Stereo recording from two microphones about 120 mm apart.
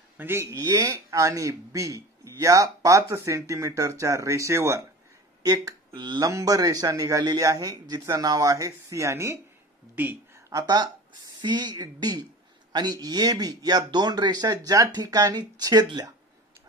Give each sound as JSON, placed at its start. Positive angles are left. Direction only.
{"t": 0.2, "sound": "speech", "side_deg": -20}
{"t": 10.5, "sound": "speech", "side_deg": -35}